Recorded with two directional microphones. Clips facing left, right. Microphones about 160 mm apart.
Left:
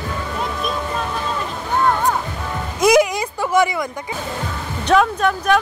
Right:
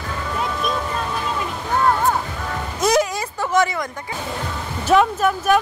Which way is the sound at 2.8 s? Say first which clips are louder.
Left 5 dB; 10° left (ahead or behind).